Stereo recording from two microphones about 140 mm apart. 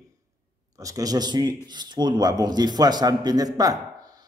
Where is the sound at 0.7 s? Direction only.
25° right (ahead or behind).